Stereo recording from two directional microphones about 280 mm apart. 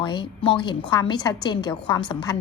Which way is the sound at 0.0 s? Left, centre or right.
Centre.